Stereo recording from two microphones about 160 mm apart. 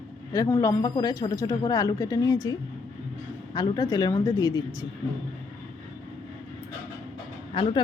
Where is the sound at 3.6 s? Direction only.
20° left (ahead or behind).